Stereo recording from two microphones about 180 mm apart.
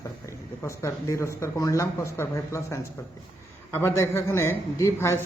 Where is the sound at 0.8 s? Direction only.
15° left (ahead or behind).